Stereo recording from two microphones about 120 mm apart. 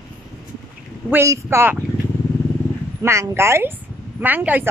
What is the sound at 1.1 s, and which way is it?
Speech, 25° right (ahead or behind).